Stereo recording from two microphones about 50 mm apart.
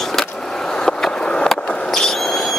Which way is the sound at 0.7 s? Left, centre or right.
Centre.